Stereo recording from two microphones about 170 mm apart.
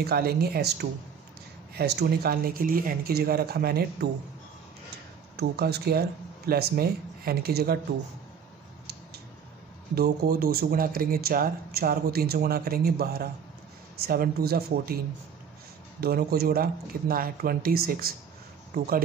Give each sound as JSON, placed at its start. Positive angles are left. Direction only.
{"t": 0.0, "sound": "speech", "side_deg": -65}
{"t": 5.3, "sound": "speech", "side_deg": -75}
{"t": 9.9, "sound": "speech", "side_deg": -65}
{"t": 16.0, "sound": "speech", "side_deg": -65}